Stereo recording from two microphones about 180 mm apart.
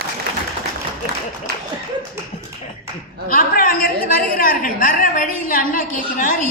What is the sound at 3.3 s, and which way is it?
A woman's voice, 50° left (ahead or behind).